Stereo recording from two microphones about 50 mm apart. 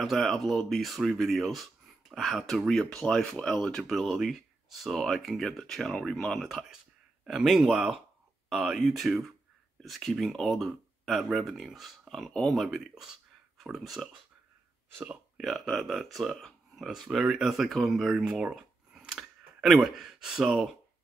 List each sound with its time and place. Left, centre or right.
0.0 s speech: centre
7.2 s speech: centre
12.7 s speech: centre
15.4 s speech: centre
18.1 s speech: centre
18.5 s a sound: centre